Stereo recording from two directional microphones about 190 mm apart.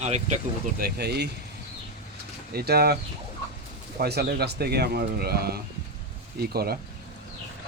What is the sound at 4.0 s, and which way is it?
Speech, 60° right (ahead or behind).